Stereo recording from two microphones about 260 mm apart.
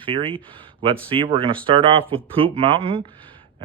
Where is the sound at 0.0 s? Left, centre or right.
Centre.